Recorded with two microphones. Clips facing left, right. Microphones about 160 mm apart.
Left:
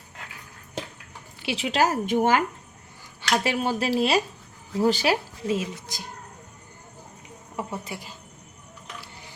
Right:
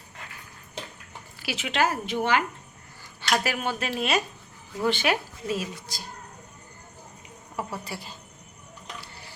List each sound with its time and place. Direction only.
1.4 s a woman's voice: 30° left (ahead or behind); by 2.4 s 45° left (ahead or behind)
3.2 s a sound: 15° left (ahead or behind)
3.4 s a woman's voice: 30° left (ahead or behind)
5.5 s speech: 20° left (ahead or behind)
7.5 s speech: 20° left (ahead or behind)